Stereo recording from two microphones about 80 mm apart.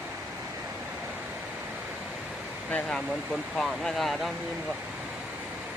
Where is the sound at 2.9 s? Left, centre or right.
Centre.